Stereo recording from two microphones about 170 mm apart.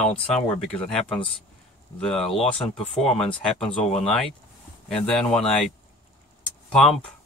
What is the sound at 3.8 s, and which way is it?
Speech, 40° left (ahead or behind).